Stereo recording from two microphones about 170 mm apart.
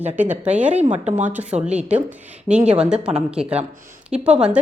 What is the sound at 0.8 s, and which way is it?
Speech, 40° right (ahead or behind).